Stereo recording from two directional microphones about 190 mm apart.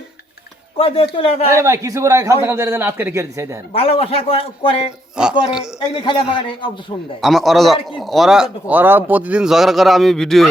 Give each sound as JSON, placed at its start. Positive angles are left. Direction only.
{"t": 0.8, "sound": "a man's voice", "side_deg": 30}
{"t": 1.5, "sound": "a man's voice", "side_deg": -15}
{"t": 3.7, "sound": "a man's voice", "side_deg": 30}
{"t": 5.2, "sound": "speech", "side_deg": -5}
{"t": 6.0, "sound": "a man's voice", "side_deg": 25}
{"t": 7.2, "sound": "speech", "side_deg": 0}